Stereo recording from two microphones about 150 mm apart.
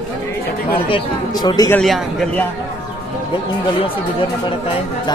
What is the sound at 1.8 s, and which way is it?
Speech, centre (ahead or behind).